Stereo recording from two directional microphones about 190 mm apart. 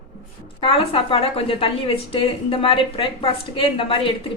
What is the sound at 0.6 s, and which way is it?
Speech, 30° left (ahead or behind).